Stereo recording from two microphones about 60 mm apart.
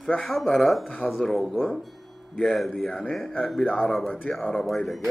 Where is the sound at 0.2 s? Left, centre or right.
Centre.